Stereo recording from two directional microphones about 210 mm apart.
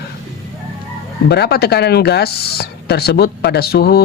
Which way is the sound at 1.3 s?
50° left (ahead or behind).